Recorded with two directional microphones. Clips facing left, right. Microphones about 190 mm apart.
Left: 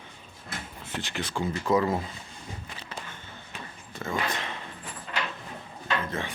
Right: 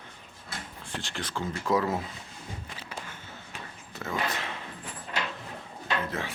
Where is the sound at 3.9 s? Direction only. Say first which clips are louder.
Left 1 dB; centre (ahead or behind).